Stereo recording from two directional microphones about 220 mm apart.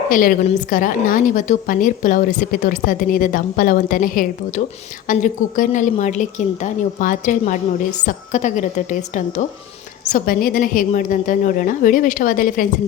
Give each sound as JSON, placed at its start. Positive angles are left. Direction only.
{"t": 0.1, "sound": "a woman's voice", "side_deg": 40}